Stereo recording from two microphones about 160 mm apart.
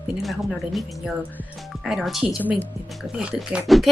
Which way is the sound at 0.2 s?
Centre (ahead or behind).